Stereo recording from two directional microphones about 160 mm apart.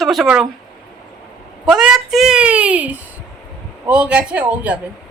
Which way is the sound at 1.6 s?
5° right (ahead or behind).